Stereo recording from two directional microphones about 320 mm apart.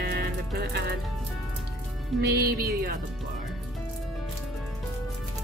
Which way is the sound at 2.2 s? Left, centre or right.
Right.